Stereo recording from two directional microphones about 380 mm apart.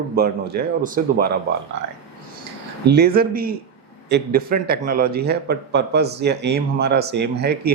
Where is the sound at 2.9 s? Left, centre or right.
Right.